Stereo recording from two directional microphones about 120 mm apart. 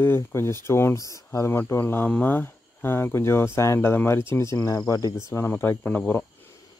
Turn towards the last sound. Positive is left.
turn(degrees=15)  # may be behind; listen again after turning